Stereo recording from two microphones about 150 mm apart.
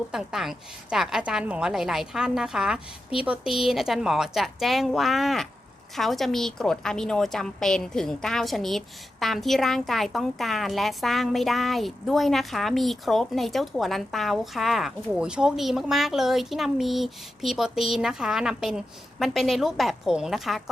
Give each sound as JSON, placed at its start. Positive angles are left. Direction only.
{"t": 0.1, "sound": "a woman's voice", "side_deg": -5}